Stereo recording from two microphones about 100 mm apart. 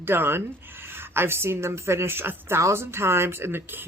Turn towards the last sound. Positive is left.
turn(degrees=-20)  # may be behind; listen again after turning